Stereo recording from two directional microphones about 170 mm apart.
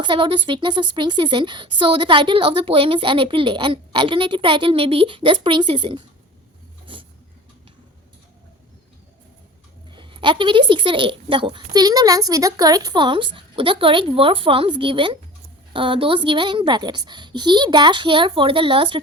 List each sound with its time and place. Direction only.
0.0 s a woman's voice: 30° right (ahead or behind)
6.9 s a sound: 30° right (ahead or behind)
9.9 s a woman's voice: 30° right (ahead or behind)